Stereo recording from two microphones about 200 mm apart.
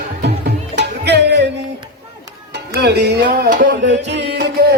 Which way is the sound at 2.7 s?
55° right (ahead or behind).